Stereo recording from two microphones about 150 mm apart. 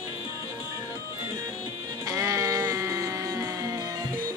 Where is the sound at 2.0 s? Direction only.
20° right (ahead or behind).